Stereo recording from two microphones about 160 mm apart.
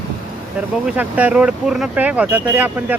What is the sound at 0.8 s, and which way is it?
Speech, 10° right (ahead or behind).